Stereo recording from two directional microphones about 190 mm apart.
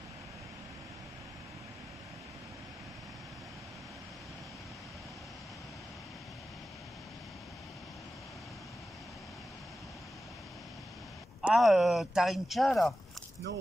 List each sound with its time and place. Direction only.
11.4 s speech: centre (ahead or behind)
13.5 s speech: 70° right (ahead or behind)